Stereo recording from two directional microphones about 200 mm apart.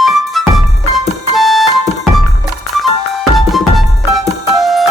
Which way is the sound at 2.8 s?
Centre (ahead or behind).